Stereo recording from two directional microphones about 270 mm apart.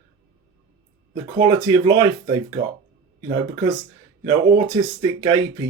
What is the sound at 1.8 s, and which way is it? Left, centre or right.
Speech, centre.